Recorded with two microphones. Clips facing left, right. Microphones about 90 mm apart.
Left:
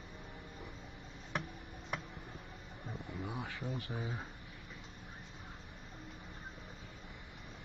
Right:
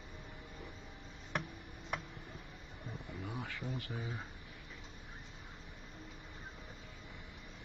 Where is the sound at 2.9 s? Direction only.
15° left (ahead or behind).